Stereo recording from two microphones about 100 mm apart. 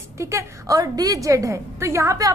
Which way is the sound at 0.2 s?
30° right (ahead or behind).